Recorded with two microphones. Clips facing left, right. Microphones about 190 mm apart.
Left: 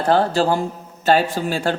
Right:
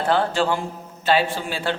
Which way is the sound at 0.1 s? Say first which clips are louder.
Left 4 dB; 40° left (ahead or behind).